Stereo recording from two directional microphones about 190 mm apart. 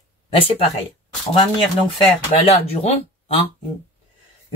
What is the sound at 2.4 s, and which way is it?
Speech, 30° left (ahead or behind).